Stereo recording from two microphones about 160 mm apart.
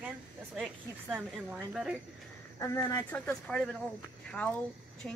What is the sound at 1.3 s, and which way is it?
Speech, 5° right (ahead or behind).